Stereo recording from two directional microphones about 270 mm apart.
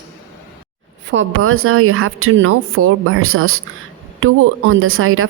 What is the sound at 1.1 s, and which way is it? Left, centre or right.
Speech, right.